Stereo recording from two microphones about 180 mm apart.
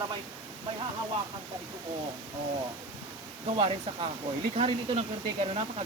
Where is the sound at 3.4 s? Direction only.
35° right (ahead or behind).